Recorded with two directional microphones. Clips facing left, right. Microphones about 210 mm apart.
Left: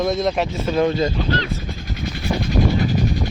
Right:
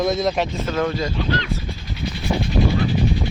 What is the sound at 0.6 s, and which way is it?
Speech, 15° left (ahead or behind).